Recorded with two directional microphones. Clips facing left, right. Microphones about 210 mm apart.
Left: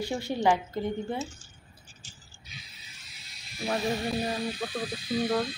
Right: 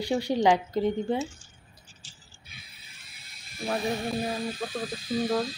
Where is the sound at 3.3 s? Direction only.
55° right (ahead or behind).